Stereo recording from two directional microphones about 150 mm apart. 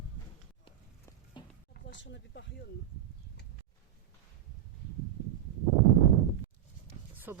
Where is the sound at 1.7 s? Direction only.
90° left.